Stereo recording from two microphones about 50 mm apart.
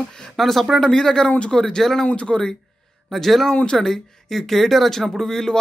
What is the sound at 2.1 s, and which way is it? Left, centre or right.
Speech, left.